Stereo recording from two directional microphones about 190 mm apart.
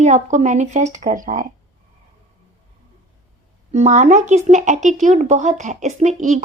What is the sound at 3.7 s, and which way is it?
A woman's voice, 35° right (ahead or behind).